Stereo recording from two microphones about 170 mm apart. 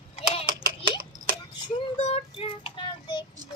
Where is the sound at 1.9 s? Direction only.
35° left (ahead or behind).